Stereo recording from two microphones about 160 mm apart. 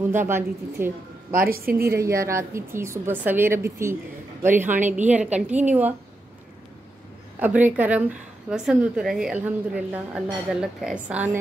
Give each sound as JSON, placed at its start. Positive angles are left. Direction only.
{"t": 0.0, "sound": "a woman's voice", "side_deg": -15}
{"t": 1.3, "sound": "a woman's voice", "side_deg": -65}
{"t": 2.0, "sound": "a woman's voice", "side_deg": -20}
{"t": 7.3, "sound": "a woman's voice", "side_deg": -10}